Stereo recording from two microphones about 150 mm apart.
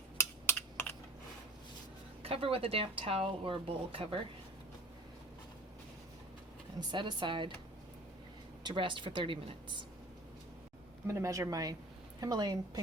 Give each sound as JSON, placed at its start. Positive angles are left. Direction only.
{"t": 0.2, "sound": "computer keyboard", "side_deg": 15}
{"t": 2.2, "sound": "a woman's voice", "side_deg": -40}
{"t": 6.7, "sound": "a woman's voice", "side_deg": -30}
{"t": 8.6, "sound": "a woman's voice", "side_deg": -35}
{"t": 11.0, "sound": "speech", "side_deg": -20}